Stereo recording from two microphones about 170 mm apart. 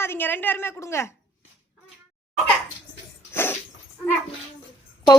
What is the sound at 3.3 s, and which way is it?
Dog, 15° left (ahead or behind).